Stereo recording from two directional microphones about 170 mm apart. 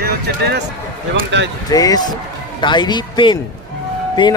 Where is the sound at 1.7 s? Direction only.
20° left (ahead or behind).